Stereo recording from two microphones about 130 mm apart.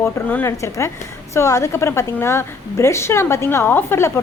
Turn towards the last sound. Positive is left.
turn(degrees=20)  # may be behind; listen again after turning